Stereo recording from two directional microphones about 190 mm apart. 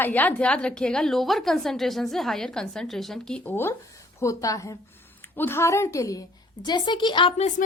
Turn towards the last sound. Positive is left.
turn(degrees=25)  # may be behind; listen again after turning